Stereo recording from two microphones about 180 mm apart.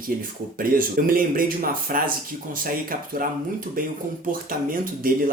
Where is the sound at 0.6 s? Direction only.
55° right (ahead or behind).